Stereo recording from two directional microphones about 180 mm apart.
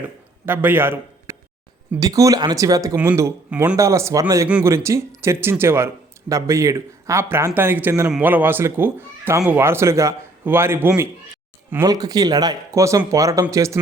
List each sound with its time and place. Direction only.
0.4 s speech: 10° right (ahead or behind)
4.4 s speech: 5° right (ahead or behind)